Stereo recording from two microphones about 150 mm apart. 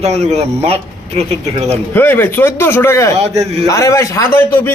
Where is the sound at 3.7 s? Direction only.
20° left (ahead or behind).